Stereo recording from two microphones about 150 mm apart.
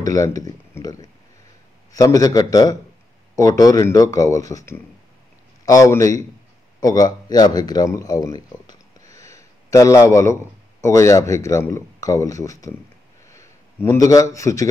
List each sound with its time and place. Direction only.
0.0 s a man's voice: 20° left (ahead or behind)